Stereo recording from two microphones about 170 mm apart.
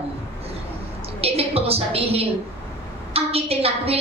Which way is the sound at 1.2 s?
35° right (ahead or behind).